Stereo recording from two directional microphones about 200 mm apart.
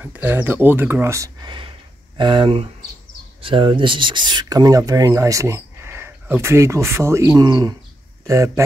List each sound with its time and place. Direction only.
0.0 s speech: 10° right (ahead or behind)